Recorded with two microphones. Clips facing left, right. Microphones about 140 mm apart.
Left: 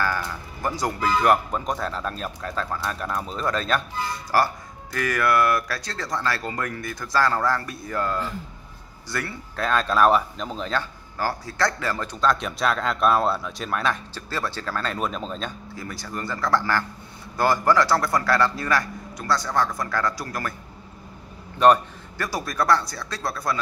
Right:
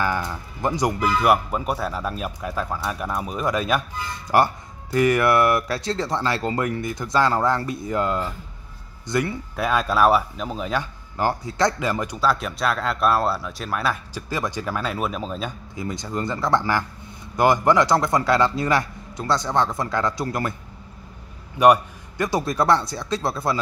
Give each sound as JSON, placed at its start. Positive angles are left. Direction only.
{"t": 0.0, "sound": "speech", "side_deg": -20}
{"t": 21.5, "sound": "speech", "side_deg": -15}